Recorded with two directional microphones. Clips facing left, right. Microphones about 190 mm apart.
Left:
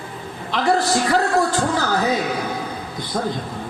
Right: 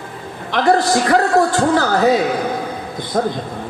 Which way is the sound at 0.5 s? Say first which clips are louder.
Right 4 dB; 55° right (ahead or behind).